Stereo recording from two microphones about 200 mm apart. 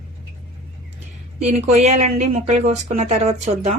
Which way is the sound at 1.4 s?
35° right (ahead or behind).